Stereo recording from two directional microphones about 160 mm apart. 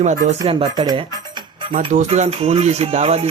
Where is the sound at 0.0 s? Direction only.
50° right (ahead or behind).